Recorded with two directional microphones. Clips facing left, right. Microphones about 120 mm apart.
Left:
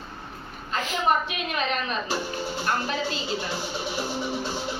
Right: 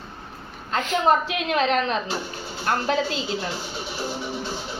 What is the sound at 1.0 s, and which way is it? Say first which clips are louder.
Speech: right 3 dB; 90° right.